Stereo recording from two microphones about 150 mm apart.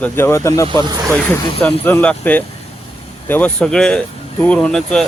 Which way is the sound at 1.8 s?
10° left (ahead or behind).